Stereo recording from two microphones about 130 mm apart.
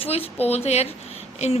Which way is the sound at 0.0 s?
50° left (ahead or behind).